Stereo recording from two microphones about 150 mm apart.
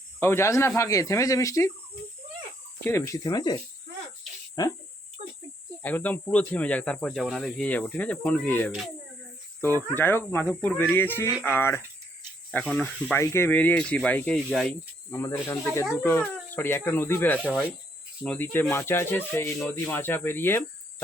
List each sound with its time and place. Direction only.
0.2 s speech: 15° left (ahead or behind)
2.8 s speech: 20° left (ahead or behind)
5.8 s speech: 10° left (ahead or behind)
15.1 s speech: 15° left (ahead or behind)